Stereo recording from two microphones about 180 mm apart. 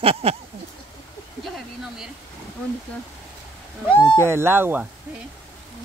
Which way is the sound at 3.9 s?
25° left (ahead or behind).